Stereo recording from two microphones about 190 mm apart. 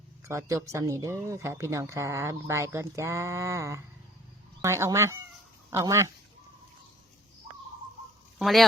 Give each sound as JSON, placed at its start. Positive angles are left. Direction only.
{"t": 0.3, "sound": "speech", "side_deg": -15}
{"t": 8.4, "sound": "speech", "side_deg": 0}